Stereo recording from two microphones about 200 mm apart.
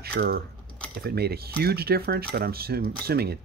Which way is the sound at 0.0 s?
50° right (ahead or behind).